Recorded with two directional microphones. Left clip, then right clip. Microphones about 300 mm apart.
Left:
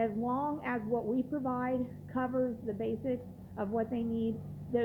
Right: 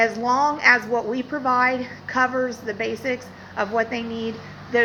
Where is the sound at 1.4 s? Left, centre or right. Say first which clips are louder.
Right 15 dB; centre.